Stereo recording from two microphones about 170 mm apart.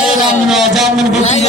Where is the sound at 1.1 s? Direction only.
40° left (ahead or behind).